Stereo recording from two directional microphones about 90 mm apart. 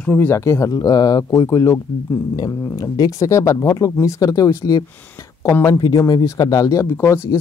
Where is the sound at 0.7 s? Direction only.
50° left (ahead or behind).